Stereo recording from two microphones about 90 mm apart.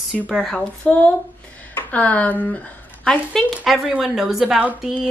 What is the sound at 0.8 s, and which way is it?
Speech, 15° left (ahead or behind).